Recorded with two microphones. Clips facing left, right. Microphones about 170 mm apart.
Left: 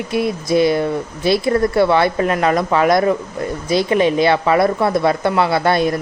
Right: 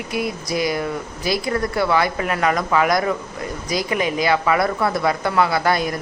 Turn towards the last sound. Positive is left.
turn(degrees=25)  # may be behind; listen again after turning